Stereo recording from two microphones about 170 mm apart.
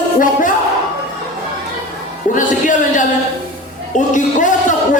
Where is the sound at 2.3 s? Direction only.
50° left (ahead or behind).